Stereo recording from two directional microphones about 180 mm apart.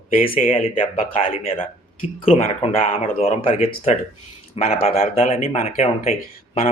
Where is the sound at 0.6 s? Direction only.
50° left (ahead or behind).